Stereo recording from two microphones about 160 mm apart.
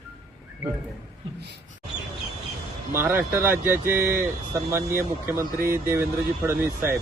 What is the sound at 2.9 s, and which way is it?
Speech, 15° right (ahead or behind).